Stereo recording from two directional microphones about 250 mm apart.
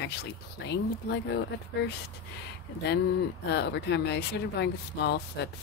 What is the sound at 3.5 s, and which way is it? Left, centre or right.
Speech, left.